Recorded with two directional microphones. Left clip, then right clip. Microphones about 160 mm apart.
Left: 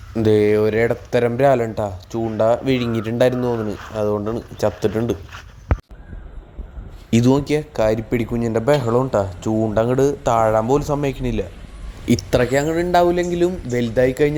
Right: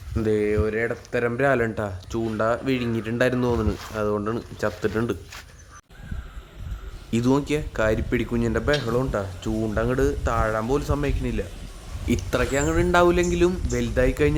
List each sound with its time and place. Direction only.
0.2 s speech: 30° left (ahead or behind)
1.5 s speech: centre (ahead or behind)
4.5 s speech: 10° left (ahead or behind)
7.1 s speech: 20° left (ahead or behind)
8.8 s speech: 5° right (ahead or behind)
9.1 s speech: 10° left (ahead or behind)